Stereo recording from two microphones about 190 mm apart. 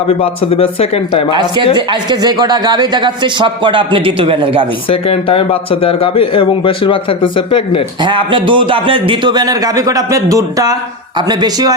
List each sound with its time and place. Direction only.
0.1 s speech: 30° left (ahead or behind)
1.3 s a man's voice: 25° right (ahead or behind)
4.9 s speech: 30° left (ahead or behind)
8.0 s a man's voice: 25° right (ahead or behind)